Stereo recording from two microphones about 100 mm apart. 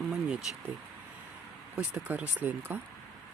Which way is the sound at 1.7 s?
10° right (ahead or behind).